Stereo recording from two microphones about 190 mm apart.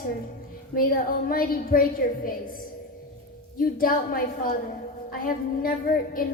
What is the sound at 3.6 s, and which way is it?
Speech, 50° left (ahead or behind).